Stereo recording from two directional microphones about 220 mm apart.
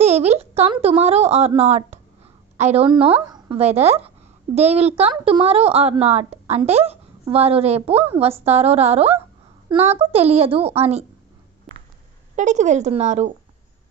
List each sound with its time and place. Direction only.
0.0 s a woman's voice: 30° right (ahead or behind)
11.7 s a sound: centre (ahead or behind)
12.4 s a woman's voice: 35° right (ahead or behind)